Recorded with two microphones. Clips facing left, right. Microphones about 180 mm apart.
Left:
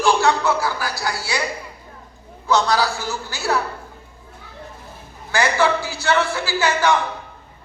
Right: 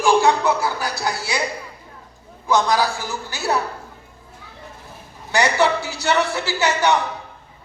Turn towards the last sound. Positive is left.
turn(degrees=-25)  # may be behind; listen again after turning